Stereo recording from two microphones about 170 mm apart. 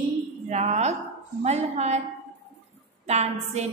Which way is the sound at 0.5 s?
40° right (ahead or behind).